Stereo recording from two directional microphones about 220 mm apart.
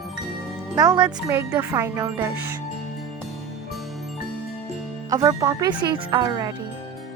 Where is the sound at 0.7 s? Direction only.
15° right (ahead or behind).